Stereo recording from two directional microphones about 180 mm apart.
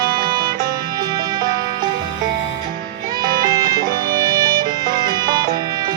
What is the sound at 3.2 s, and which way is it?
Music, 20° right (ahead or behind).